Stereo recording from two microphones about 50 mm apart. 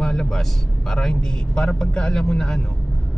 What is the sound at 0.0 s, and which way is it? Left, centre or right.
A man's voice, centre.